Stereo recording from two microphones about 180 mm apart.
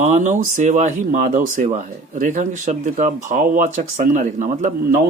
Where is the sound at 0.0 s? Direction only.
40° right (ahead or behind).